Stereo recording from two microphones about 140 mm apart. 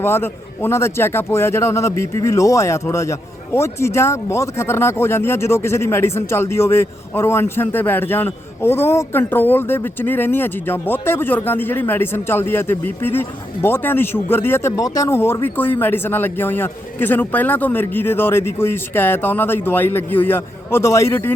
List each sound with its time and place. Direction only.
0.0 s a man's voice: 15° left (ahead or behind)